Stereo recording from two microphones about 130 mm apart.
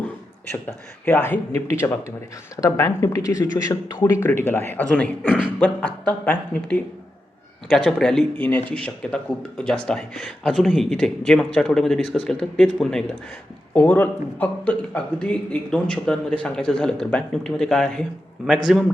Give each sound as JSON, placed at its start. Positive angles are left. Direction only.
{"t": 1.0, "sound": "a man's voice", "side_deg": 20}
{"t": 5.3, "sound": "beatboxing", "side_deg": -10}
{"t": 5.5, "sound": "a man's voice", "side_deg": 10}
{"t": 7.9, "sound": "a man's voice", "side_deg": 5}